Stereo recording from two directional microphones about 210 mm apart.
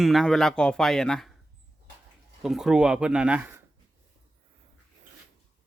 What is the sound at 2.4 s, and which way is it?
Speech, centre (ahead or behind).